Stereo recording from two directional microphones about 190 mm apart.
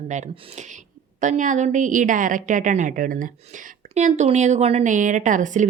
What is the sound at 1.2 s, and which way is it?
A woman's voice, 40° right (ahead or behind).